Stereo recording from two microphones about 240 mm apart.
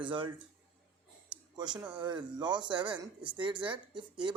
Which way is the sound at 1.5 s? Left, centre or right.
Centre.